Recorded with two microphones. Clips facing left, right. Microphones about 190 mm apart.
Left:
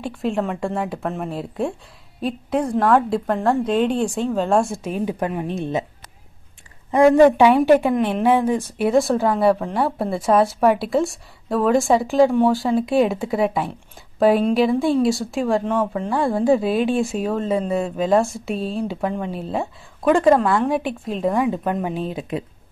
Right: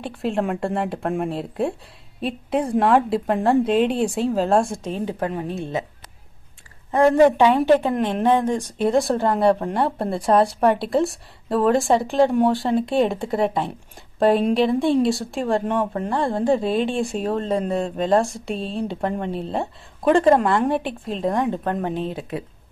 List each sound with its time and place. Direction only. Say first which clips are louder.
0.0 s speech: left 1 dB; centre (ahead or behind)
2.9 s speech: even; centre (ahead or behind); by 5.9 s 20° left (ahead or behind)
6.9 s speech: left 2 dB; 10° left (ahead or behind)